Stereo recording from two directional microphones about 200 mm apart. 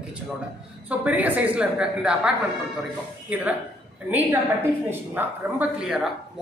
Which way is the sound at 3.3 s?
10° right (ahead or behind).